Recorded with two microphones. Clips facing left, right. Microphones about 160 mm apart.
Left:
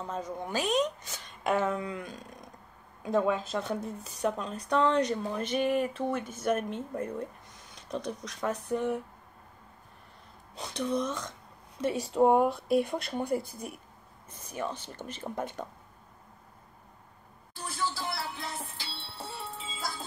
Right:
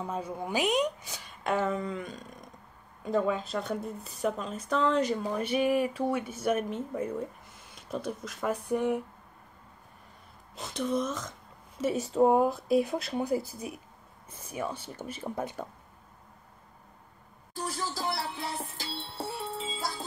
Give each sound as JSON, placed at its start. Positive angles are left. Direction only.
{"t": 0.0, "sound": "a woman's voice", "side_deg": -10}
{"t": 1.7, "sound": "a woman's voice", "side_deg": 0}
{"t": 10.5, "sound": "a woman's voice", "side_deg": 0}
{"t": 17.6, "sound": "music", "side_deg": -40}